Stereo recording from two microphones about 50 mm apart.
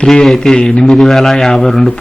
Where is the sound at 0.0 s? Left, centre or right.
Centre.